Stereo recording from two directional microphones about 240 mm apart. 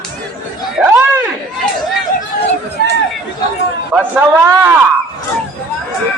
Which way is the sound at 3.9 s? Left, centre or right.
Centre.